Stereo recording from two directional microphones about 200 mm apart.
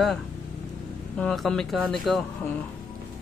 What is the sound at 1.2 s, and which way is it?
Speech, 5° left (ahead or behind).